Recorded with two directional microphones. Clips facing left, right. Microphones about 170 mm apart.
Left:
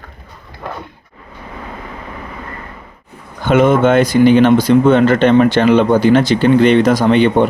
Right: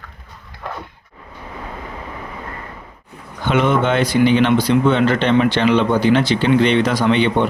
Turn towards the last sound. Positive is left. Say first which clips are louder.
# left 5 dB
turn(degrees=45)  # may be behind; listen again after turning